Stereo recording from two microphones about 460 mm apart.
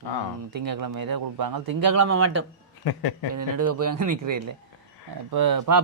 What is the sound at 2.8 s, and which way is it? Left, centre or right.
Speech, left.